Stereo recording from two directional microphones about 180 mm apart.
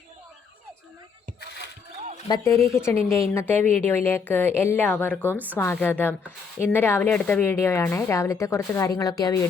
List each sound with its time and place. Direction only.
2.3 s speech: 15° left (ahead or behind)
2.9 s a woman's voice: 35° right (ahead or behind)
3.3 s speech: 10° left (ahead or behind)